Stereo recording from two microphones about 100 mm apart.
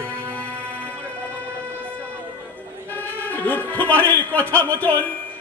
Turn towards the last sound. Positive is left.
turn(degrees=15)  # may be behind; listen again after turning